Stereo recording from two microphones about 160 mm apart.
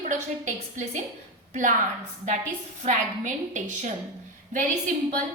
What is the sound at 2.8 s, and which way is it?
A woman's voice, 50° right (ahead or behind).